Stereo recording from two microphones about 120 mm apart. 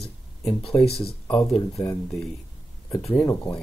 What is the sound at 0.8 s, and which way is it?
Speech, 60° left (ahead or behind).